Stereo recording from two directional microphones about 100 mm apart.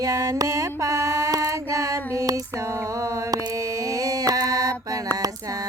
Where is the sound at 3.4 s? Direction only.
35° right (ahead or behind).